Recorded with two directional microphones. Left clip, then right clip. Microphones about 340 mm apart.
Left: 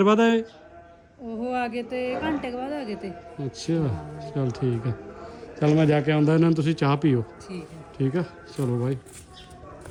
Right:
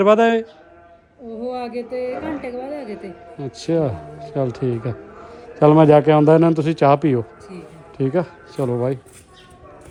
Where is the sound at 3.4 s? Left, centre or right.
Centre.